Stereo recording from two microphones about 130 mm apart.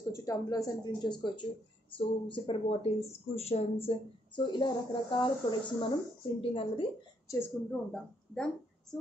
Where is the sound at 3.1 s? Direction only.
55° left (ahead or behind).